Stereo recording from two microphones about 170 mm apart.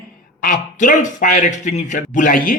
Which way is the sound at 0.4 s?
55° left (ahead or behind).